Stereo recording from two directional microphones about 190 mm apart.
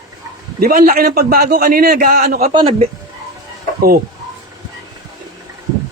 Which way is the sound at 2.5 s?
30° right (ahead or behind).